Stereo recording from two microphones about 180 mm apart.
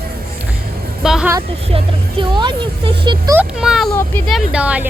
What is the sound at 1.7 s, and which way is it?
Speech, 25° right (ahead or behind).